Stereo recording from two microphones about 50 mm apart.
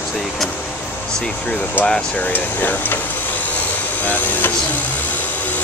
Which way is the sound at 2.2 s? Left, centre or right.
Left.